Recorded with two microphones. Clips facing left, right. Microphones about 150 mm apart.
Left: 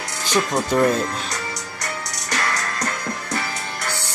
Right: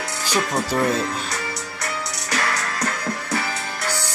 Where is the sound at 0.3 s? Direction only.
5° right (ahead or behind).